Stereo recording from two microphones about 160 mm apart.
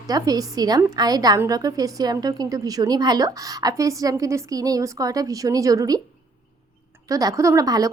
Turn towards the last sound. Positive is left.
turn(degrees=-20)  # may be behind; listen again after turning